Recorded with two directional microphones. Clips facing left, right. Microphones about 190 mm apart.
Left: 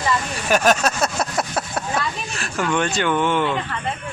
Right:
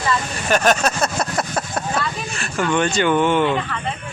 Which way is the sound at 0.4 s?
5° left (ahead or behind).